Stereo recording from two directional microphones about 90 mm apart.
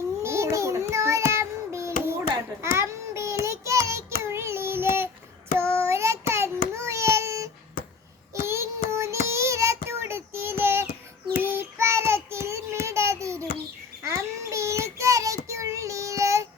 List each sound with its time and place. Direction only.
0.2 s child singing: 30° right (ahead or behind)